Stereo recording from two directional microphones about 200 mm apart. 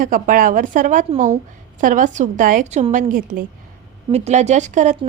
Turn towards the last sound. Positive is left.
turn(degrees=-35)  # may be behind; listen again after turning